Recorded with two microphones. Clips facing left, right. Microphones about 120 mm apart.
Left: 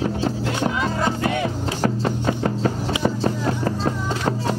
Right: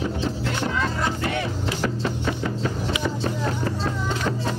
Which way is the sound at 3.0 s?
40° left (ahead or behind).